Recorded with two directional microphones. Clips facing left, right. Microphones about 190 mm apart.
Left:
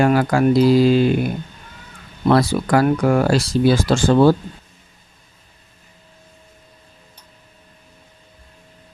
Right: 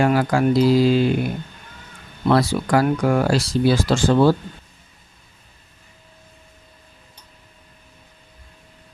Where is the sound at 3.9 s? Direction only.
50° left (ahead or behind).